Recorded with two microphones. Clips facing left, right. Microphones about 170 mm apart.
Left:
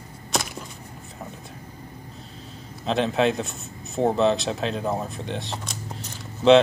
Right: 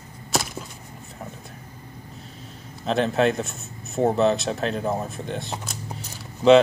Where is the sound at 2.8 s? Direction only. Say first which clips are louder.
Right 1 dB; centre (ahead or behind).